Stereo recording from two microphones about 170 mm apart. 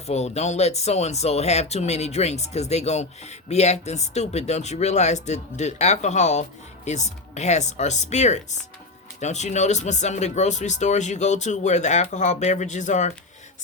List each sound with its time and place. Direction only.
0.1 s speech: 40° left (ahead or behind)